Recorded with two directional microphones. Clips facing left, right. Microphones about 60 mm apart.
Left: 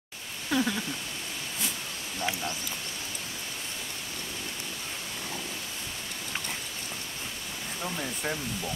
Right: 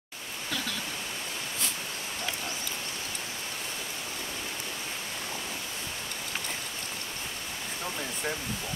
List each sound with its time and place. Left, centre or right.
0.5 s speech: left
7.8 s speech: centre